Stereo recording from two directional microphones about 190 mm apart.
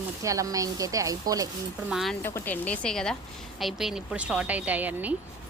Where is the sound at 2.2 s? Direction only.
10° left (ahead or behind); by 5.1 s 10° right (ahead or behind).